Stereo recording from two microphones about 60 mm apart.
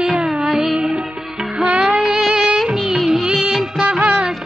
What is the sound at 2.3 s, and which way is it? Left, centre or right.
Music, centre.